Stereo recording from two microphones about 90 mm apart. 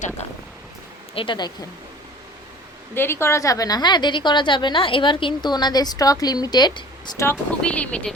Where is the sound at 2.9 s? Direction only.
25° left (ahead or behind); by 5.5 s 70° left (ahead or behind).